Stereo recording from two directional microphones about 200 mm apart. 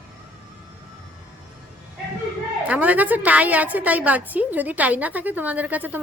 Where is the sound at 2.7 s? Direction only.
5° right (ahead or behind).